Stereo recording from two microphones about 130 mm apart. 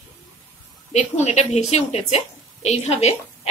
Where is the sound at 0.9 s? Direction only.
60° left (ahead or behind).